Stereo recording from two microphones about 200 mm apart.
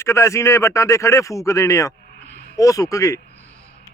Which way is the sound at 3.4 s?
5° left (ahead or behind).